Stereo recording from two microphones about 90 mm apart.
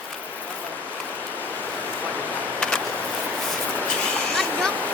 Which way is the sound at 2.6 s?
10° left (ahead or behind).